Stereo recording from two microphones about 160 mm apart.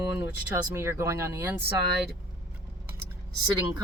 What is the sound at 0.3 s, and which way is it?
Speech, 15° right (ahead or behind).